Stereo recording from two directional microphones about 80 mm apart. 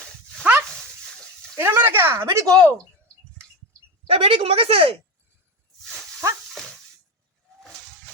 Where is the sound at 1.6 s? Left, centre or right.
Right.